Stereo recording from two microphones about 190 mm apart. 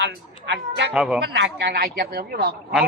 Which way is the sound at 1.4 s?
55° right (ahead or behind).